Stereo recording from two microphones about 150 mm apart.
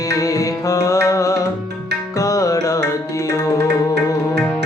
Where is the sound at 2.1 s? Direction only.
20° left (ahead or behind).